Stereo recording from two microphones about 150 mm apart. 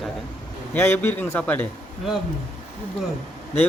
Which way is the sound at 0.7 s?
15° left (ahead or behind).